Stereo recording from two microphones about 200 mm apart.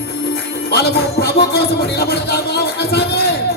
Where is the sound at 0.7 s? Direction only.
55° left (ahead or behind).